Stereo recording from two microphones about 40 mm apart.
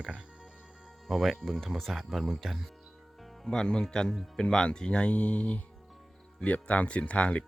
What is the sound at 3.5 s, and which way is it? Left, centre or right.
Speech, centre.